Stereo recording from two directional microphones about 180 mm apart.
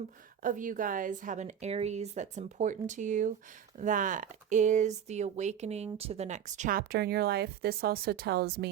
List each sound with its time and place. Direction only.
0.4 s speech: 50° right (ahead or behind); by 8.7 s 65° right (ahead or behind)